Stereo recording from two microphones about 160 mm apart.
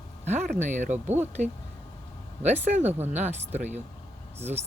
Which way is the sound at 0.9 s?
10° right (ahead or behind).